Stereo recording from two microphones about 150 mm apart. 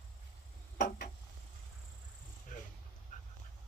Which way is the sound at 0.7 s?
80° left.